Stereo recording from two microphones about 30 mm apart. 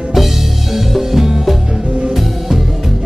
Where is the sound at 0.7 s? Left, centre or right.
Centre.